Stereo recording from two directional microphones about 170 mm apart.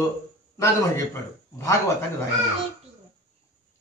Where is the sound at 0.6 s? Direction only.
15° left (ahead or behind).